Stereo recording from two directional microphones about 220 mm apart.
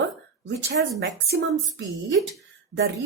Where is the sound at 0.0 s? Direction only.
55° right (ahead or behind).